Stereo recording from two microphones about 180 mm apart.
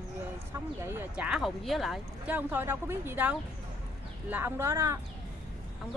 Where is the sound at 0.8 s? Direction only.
15° right (ahead or behind).